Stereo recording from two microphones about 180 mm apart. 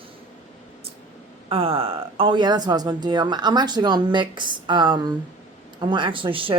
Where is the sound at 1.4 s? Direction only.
30° right (ahead or behind).